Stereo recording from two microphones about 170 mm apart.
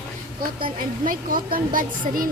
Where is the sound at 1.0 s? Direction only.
55° right (ahead or behind).